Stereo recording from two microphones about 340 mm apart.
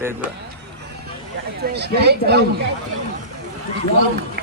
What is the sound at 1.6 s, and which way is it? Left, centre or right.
Speech, right.